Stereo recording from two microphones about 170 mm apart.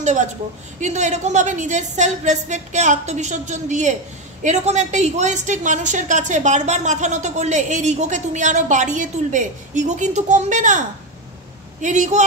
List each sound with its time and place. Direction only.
0.0 s a woman's voice: 45° right (ahead or behind)